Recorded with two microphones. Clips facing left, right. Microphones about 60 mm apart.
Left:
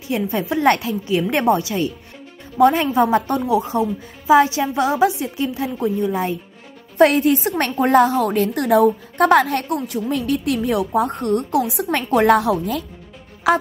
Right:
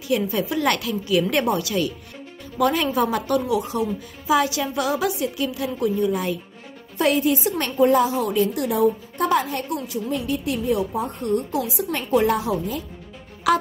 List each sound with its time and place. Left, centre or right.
0.1 s a woman's voice: left
7.0 s a woman's voice: left
13.4 s speech: left